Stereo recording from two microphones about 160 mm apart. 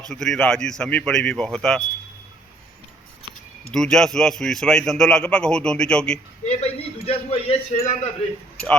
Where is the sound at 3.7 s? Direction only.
5° left (ahead or behind).